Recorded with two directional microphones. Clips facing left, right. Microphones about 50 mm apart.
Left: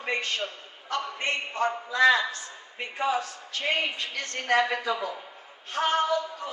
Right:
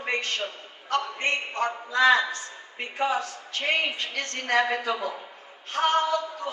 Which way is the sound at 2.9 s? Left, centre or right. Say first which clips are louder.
Right 1 dB; right.